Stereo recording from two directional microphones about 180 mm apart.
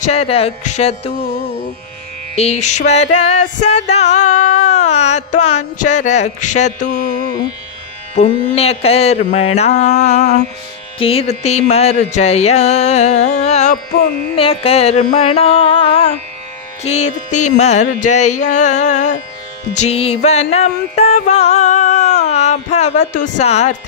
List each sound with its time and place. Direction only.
0.0 s music: 35° left (ahead or behind)
2.3 s music: 35° left (ahead or behind)
8.1 s music: 35° left (ahead or behind)